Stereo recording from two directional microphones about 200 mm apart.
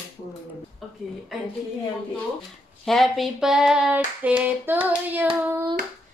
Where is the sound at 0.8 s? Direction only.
Centre (ahead or behind).